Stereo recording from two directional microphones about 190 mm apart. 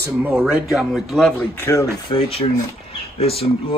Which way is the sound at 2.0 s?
30° left (ahead or behind).